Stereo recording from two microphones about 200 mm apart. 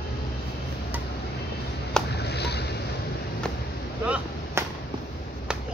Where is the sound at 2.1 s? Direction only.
55° left (ahead or behind).